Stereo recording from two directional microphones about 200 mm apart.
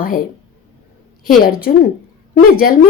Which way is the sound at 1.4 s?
50° left (ahead or behind).